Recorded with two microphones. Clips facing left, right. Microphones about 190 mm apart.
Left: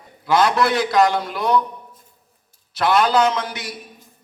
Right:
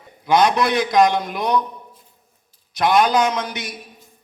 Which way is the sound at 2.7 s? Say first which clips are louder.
Even; 15° right (ahead or behind).